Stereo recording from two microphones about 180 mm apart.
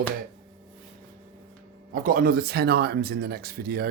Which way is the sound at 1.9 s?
50° right (ahead or behind).